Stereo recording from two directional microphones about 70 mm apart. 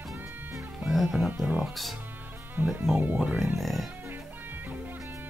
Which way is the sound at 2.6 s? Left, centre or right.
Right.